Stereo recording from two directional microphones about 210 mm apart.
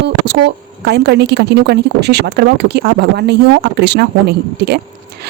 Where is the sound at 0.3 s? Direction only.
55° right (ahead or behind).